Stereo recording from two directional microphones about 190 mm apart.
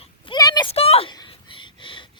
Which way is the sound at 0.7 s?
30° left (ahead or behind).